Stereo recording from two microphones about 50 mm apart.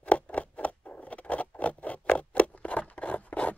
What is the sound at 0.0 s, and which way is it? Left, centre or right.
Patter, left.